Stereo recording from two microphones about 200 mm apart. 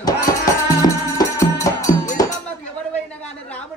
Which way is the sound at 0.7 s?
15° left (ahead or behind).